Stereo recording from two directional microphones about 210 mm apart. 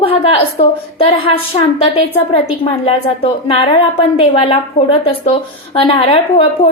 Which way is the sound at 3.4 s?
30° left (ahead or behind).